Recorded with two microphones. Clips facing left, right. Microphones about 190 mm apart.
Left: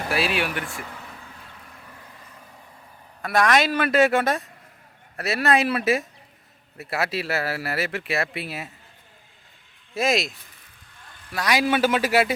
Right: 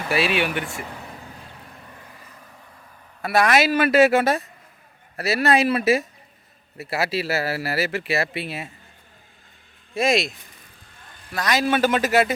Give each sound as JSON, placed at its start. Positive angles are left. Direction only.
{"t": 0.1, "sound": "speech", "side_deg": 0}
{"t": 1.0, "sound": "vehicle", "side_deg": -30}
{"t": 3.2, "sound": "speech", "side_deg": -5}
{"t": 9.9, "sound": "speech", "side_deg": 0}